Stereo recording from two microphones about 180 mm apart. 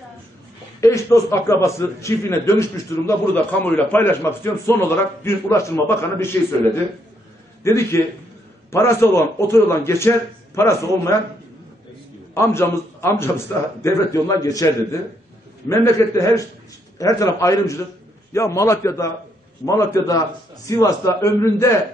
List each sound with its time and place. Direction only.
0.7 s a man's voice: 15° left (ahead or behind)
12.4 s a man's voice: 15° left (ahead or behind)